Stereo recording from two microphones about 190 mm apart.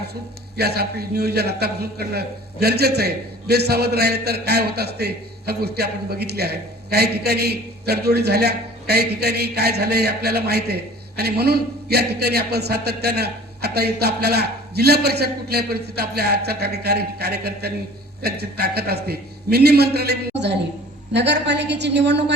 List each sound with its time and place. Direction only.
0.5 s a man's voice: 55° right (ahead or behind)